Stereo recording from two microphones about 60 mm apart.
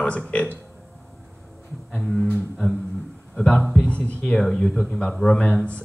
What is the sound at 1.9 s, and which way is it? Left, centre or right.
A man's voice, centre.